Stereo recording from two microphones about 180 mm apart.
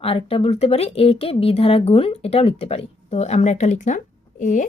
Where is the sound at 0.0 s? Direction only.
35° left (ahead or behind).